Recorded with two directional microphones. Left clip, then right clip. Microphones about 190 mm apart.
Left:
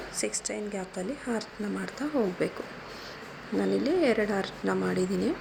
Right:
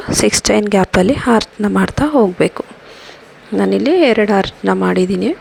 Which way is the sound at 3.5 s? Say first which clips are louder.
Right 14 dB; 45° right (ahead or behind).